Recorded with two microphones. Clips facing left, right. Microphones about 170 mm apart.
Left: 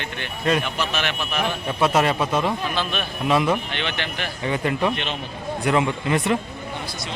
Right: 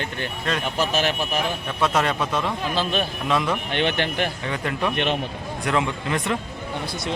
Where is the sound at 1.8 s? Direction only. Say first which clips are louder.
Left 3 dB; 5° left (ahead or behind).